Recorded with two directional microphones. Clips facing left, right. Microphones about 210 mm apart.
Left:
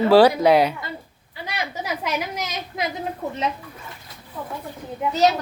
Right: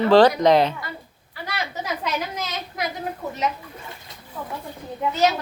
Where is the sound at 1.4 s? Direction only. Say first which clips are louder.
Even; 15° left (ahead or behind).